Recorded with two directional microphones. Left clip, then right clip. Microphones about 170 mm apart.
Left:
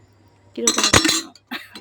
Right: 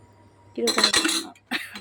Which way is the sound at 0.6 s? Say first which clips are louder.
Left 4 dB; 40° left (ahead or behind).